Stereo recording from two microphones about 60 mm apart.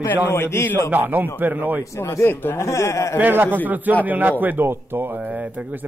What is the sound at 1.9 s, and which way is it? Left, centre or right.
A man's voice, left.